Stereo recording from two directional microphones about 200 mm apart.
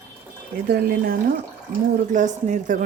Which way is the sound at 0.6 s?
50° right (ahead or behind).